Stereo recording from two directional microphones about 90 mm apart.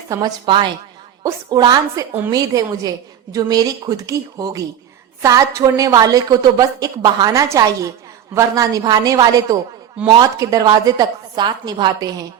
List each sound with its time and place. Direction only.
0.1 s a woman's voice: 45° right (ahead or behind)
0.4 s a woman's voice: 65° right (ahead or behind)
1.2 s a woman's voice: 40° right (ahead or behind)
1.6 s a woman's voice: 50° right (ahead or behind)